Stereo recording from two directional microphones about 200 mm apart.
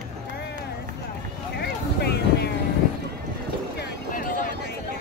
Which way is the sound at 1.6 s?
55° left (ahead or behind).